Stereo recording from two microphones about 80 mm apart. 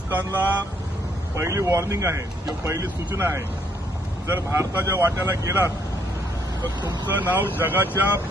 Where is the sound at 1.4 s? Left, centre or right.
Right.